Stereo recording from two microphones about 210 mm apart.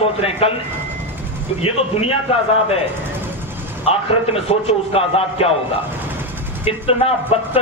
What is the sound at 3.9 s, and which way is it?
Speech, 30° left (ahead or behind).